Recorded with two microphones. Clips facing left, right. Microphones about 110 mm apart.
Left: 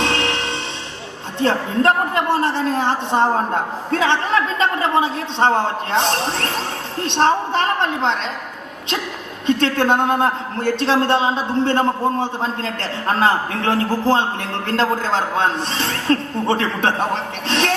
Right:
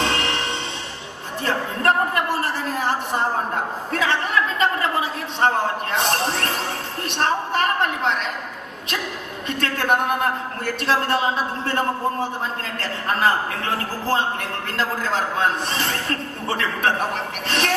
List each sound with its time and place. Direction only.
0.0 s music: 25° left (ahead or behind)
1.4 s a man's voice: 25° left (ahead or behind)
9.5 s a man's voice: 25° left (ahead or behind)